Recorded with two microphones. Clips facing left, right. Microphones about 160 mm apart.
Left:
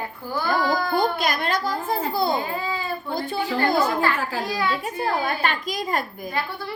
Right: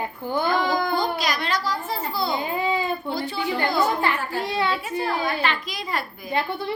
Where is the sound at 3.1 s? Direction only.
50° left (ahead or behind).